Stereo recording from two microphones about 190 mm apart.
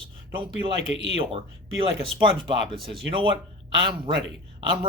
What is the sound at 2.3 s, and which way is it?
Speech, 25° right (ahead or behind).